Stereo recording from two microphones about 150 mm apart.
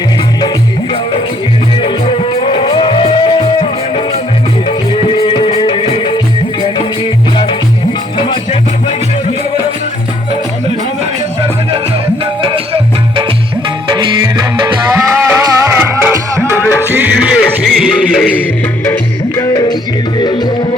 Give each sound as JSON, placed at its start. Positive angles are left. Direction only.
{"t": 1.8, "sound": "music", "side_deg": 40}
{"t": 5.0, "sound": "music", "side_deg": 35}
{"t": 12.2, "sound": "music", "side_deg": -35}
{"t": 15.3, "sound": "music", "side_deg": -15}
{"t": 16.4, "sound": "music", "side_deg": 15}
{"t": 16.9, "sound": "music", "side_deg": -10}
{"t": 19.4, "sound": "music", "side_deg": 25}